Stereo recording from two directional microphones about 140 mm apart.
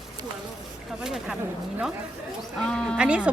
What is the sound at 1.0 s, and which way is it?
Speech, 5° right (ahead or behind).